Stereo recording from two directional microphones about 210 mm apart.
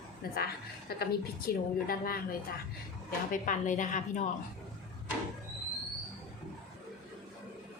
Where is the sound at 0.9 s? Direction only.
50° left (ahead or behind).